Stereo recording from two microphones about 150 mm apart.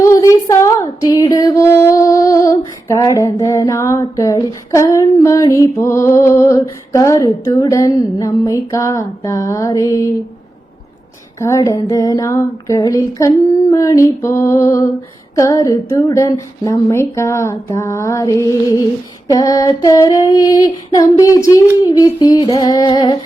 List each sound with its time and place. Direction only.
0.0 s female singing: 20° left (ahead or behind)
11.3 s female singing: 20° left (ahead or behind)